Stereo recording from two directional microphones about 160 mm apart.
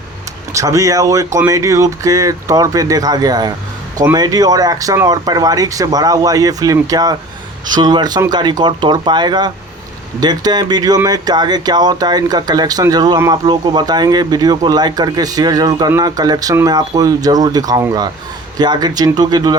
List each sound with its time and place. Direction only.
0.5 s speech: 20° right (ahead or behind)